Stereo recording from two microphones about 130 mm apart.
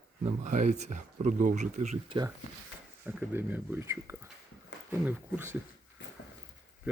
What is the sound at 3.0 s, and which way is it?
Speech, 15° right (ahead or behind).